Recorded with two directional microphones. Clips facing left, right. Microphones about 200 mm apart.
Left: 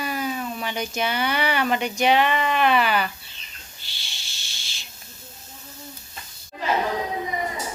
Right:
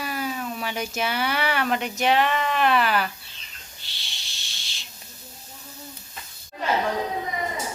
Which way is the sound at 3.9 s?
Centre (ahead or behind).